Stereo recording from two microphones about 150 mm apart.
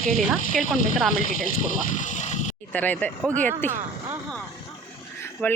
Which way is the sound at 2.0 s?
55° left (ahead or behind).